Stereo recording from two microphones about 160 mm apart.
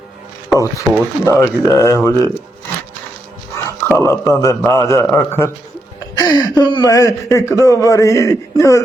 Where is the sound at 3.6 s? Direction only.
20° left (ahead or behind).